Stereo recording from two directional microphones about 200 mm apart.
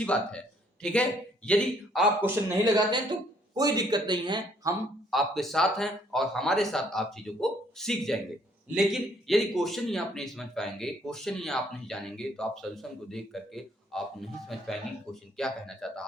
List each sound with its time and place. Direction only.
0.0 s a man's voice: 5° left (ahead or behind)
2.7 s speech: 20° right (ahead or behind)
5.1 s a man's voice: centre (ahead or behind)